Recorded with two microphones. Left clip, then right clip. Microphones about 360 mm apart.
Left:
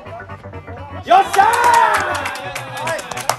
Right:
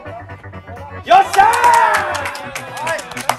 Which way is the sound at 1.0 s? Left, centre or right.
Centre.